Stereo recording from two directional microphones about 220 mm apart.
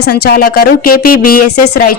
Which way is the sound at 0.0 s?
45° left (ahead or behind).